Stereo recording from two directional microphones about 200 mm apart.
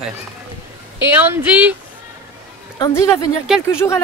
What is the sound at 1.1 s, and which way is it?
Speech, 10° right (ahead or behind).